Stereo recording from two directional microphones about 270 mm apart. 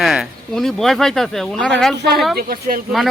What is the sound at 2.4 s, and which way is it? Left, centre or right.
Speech, right.